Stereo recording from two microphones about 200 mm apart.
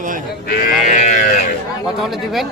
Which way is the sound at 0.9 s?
40° left (ahead or behind).